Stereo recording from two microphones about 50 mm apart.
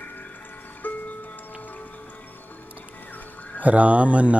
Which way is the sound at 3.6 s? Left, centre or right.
Right.